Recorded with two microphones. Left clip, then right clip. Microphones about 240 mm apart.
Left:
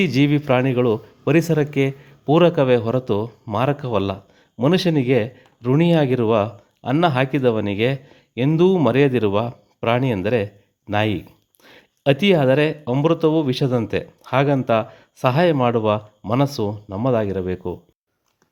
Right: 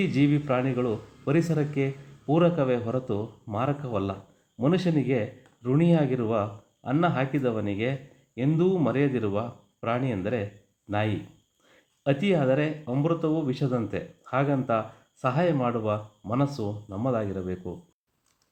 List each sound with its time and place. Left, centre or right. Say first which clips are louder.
0.0 s a man's voice: left 6 dB; left